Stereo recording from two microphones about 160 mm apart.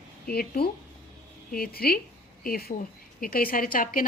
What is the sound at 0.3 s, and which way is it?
A woman's voice, 70° left (ahead or behind).